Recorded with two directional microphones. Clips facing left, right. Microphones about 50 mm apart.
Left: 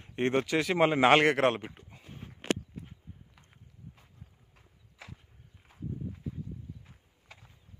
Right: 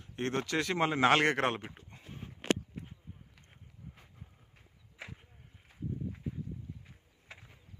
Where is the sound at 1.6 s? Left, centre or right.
Centre.